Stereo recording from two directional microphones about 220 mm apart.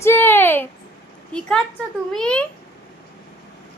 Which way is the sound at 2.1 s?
5° left (ahead or behind).